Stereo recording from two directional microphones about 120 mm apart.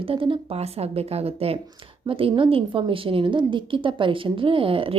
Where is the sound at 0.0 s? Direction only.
50° right (ahead or behind).